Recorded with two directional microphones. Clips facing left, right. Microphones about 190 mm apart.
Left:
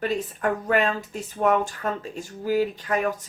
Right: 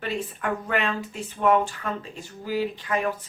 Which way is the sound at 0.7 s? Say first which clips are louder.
Left 4 dB; 40° left (ahead or behind).